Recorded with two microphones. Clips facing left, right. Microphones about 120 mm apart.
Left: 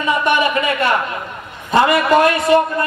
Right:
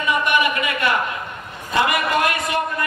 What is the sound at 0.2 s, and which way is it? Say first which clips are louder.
A man's voice: left 4 dB; 35° left (ahead or behind).